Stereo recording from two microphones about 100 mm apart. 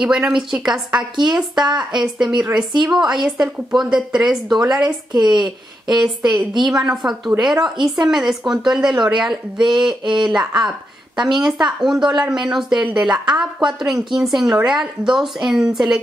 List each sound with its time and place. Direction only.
0.0 s a woman's voice: 10° right (ahead or behind)
2.5 s a woman's voice: 50° right (ahead or behind)
3.2 s a woman's voice: 5° right (ahead or behind)
5.1 s a woman's voice: 50° right (ahead or behind)
5.4 s a woman's voice: 5° right (ahead or behind)